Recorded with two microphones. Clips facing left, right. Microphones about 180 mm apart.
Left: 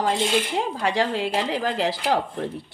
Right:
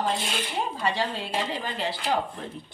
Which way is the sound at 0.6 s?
90° left.